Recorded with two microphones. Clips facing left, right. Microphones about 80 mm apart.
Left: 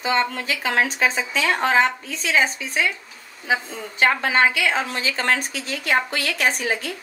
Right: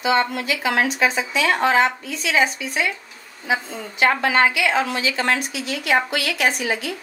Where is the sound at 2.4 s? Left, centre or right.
Left.